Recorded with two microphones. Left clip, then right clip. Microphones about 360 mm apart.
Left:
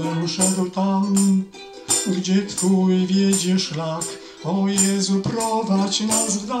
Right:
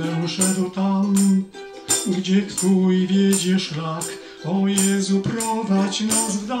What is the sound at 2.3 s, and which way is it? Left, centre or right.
Music, centre.